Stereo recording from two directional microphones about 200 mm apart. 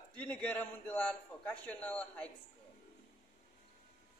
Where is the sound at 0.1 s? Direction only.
5° left (ahead or behind).